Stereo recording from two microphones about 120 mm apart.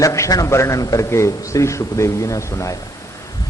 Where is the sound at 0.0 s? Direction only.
25° left (ahead or behind).